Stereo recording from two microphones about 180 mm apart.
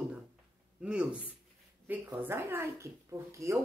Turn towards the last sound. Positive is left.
turn(degrees=-15)  # may be behind; listen again after turning